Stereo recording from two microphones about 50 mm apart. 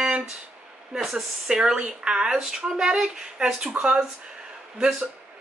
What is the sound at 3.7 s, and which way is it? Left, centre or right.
Speech, right.